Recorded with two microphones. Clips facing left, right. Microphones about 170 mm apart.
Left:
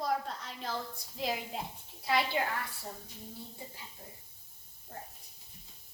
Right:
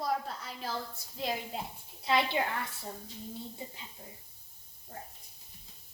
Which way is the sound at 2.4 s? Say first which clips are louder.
Right 1 dB; 20° right (ahead or behind).